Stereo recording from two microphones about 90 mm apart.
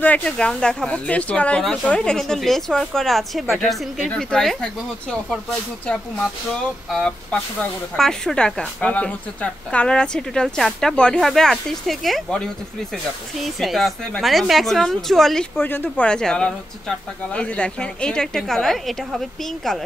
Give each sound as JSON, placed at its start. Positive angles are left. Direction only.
{"t": 0.0, "sound": "a woman's voice", "side_deg": 15}
{"t": 6.9, "sound": "a woman's voice", "side_deg": 10}
{"t": 13.6, "sound": "a woman's voice", "side_deg": 0}
{"t": 15.5, "sound": "speech", "side_deg": 20}
{"t": 16.1, "sound": "a woman's voice", "side_deg": 10}